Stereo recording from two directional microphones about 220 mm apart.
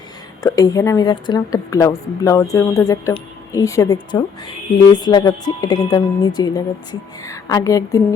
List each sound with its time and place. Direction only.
0.4 s a woman's voice: 15° left (ahead or behind)